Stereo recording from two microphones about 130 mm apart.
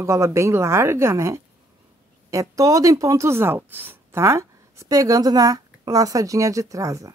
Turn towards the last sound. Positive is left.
turn(degrees=-25)  # may be behind; listen again after turning